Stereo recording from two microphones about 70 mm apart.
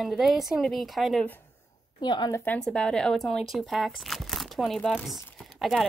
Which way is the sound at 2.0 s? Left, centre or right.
Left.